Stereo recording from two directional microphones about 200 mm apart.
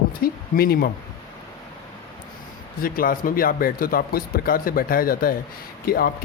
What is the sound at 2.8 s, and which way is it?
Speech, 45° left (ahead or behind).